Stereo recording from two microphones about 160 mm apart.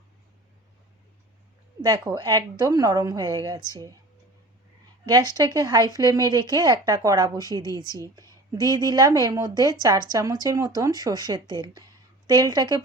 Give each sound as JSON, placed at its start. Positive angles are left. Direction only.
{"t": 1.8, "sound": "speech", "side_deg": -25}
{"t": 5.0, "sound": "speech", "side_deg": -25}